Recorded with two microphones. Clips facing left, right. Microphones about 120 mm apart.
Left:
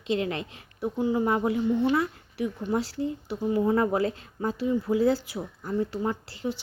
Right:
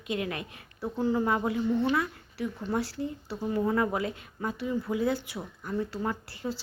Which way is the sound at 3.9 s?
30° left (ahead or behind).